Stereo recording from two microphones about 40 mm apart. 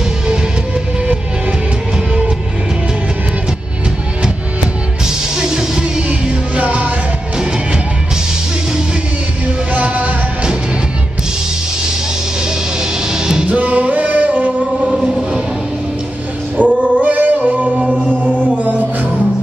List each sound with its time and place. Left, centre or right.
5.0 s music: centre; by 6.9 s right
9.7 s music: right
13.1 s music: centre
13.5 s music: right
16.5 s music: right